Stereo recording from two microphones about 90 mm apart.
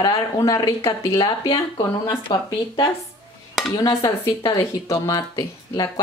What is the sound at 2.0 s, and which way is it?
Speech, 55° left (ahead or behind).